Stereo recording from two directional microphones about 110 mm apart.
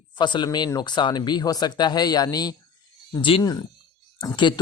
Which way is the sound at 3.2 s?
50° left (ahead or behind).